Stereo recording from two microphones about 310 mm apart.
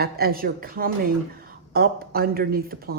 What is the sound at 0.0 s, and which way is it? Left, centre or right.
Speech, right.